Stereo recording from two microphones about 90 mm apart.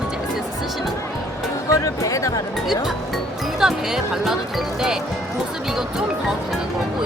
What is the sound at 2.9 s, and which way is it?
Speech, 5° right (ahead or behind).